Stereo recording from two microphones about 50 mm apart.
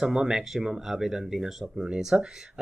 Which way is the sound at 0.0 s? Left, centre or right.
Centre.